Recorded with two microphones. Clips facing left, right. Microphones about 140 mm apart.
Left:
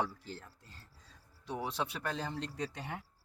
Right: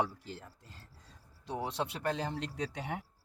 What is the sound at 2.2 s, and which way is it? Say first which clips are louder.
Speech: right 2 dB; 65° right (ahead or behind).